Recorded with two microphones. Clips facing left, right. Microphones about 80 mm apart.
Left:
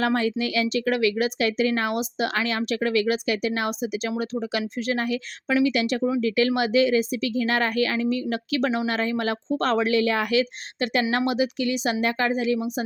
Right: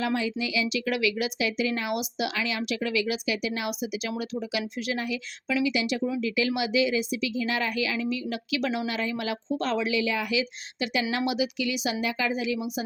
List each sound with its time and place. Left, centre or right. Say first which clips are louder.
0.0 s a woman's voice: left 5 dB; left
0.9 s a woman's voice: left 5 dB; left